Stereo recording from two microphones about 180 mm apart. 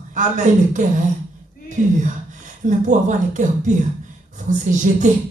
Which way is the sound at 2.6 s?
45° right (ahead or behind).